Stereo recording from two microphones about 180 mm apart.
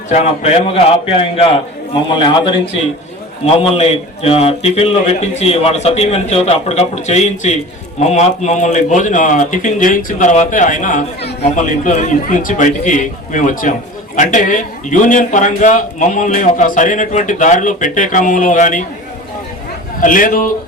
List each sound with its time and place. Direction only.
0.1 s a man's voice: 35° left (ahead or behind)
20.0 s a man's voice: 50° left (ahead or behind)